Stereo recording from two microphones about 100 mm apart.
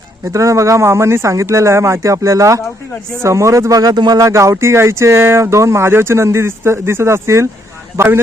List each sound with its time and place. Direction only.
0.3 s speech: 30° right (ahead or behind)
4.2 s speech: 30° right (ahead or behind)